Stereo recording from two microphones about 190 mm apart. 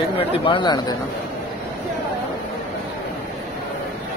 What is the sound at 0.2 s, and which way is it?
Speech, 25° left (ahead or behind).